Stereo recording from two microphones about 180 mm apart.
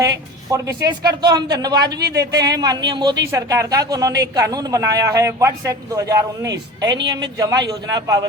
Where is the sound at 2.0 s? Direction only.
65° right (ahead or behind).